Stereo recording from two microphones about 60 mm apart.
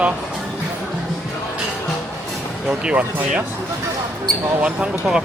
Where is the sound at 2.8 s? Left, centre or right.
Centre.